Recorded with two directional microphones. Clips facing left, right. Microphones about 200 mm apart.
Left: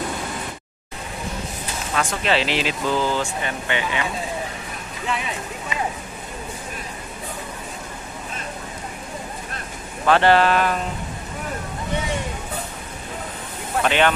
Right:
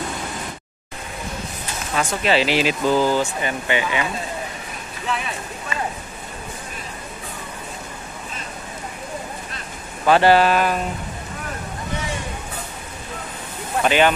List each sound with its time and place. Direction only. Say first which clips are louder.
2.0 s speech: right 2 dB; 5° right (ahead or behind)
5.7 s speech: even; 15° left (ahead or behind)
10.0 s speech: right 2 dB; 5° right (ahead or behind)
13.8 s speech: right 2 dB; 5° right (ahead or behind)